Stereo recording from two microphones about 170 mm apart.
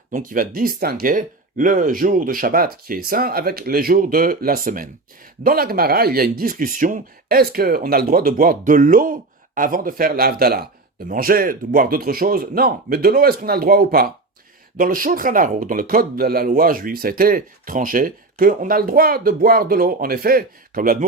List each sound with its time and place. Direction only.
0.1 s speech: 55° right (ahead or behind)